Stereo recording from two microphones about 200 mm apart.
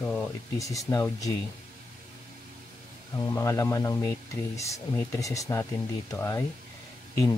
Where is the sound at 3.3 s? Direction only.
15° left (ahead or behind).